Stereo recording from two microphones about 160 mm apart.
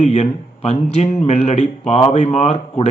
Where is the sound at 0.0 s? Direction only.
45° left (ahead or behind).